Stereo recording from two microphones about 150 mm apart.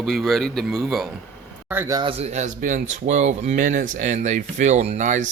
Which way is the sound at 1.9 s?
35° right (ahead or behind).